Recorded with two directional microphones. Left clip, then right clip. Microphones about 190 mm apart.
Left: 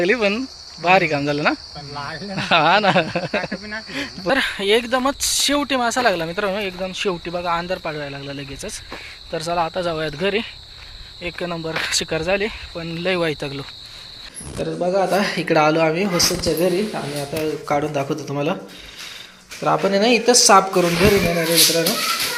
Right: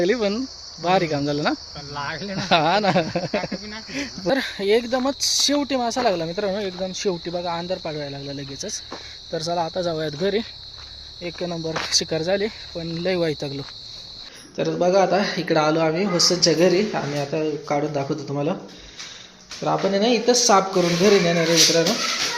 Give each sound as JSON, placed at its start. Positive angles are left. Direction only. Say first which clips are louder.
{"t": 0.0, "sound": "speech", "louder": "left 3 dB", "side_deg": 0}
{"t": 2.0, "sound": "speech", "louder": "right 1 dB", "side_deg": -25}
{"t": 2.3, "sound": "speech", "louder": "left 4 dB", "side_deg": -5}
{"t": 3.5, "sound": "speech", "louder": "left 4 dB", "side_deg": 30}
{"t": 3.9, "sound": "speech", "louder": "left 3 dB", "side_deg": -10}
{"t": 19.6, "sound": "speech", "louder": "left 3 dB", "side_deg": 5}